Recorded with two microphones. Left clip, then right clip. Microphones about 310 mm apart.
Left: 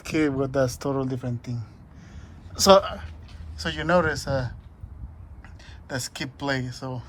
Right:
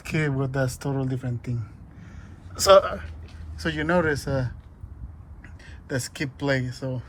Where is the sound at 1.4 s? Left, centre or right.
Centre.